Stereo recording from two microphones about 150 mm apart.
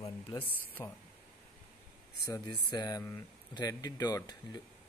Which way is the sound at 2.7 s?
25° left (ahead or behind).